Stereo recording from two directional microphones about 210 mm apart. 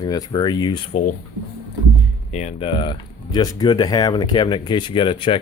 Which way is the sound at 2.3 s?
35° left (ahead or behind).